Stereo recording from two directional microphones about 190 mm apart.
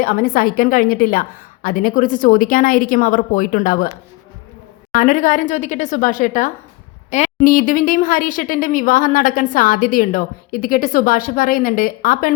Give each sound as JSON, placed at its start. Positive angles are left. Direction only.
{"t": 0.0, "sound": "a woman's voice", "side_deg": 45}
{"t": 4.9, "sound": "a woman's voice", "side_deg": 40}